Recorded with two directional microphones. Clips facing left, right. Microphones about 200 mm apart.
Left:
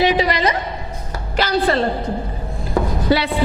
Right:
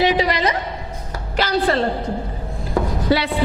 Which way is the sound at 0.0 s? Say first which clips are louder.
Left 1 dB; 10° left (ahead or behind).